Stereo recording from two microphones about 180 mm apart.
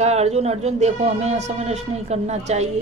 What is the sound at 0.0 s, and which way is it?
Speech, 35° right (ahead or behind).